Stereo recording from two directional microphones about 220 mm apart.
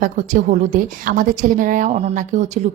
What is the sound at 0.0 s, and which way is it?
A woman's voice, 35° right (ahead or behind).